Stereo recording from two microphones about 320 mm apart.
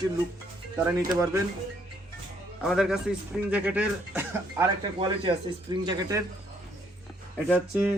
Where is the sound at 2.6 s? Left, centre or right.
Centre.